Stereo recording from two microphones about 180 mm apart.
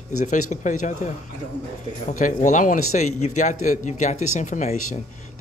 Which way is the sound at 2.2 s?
45° left (ahead or behind).